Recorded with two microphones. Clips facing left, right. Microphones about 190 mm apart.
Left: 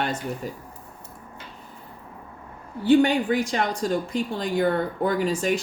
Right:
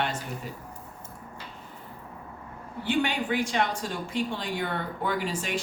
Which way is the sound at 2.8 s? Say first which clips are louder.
Left 9 dB; 40° left (ahead or behind).